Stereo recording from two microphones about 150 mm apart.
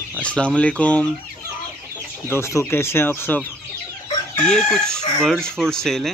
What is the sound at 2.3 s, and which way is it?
Speech, 20° left (ahead or behind).